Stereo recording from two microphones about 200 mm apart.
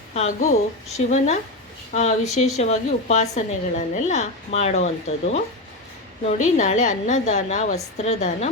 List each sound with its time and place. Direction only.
0.1 s a woman's voice: 35° left (ahead or behind)
6.2 s a woman's voice: 35° left (ahead or behind)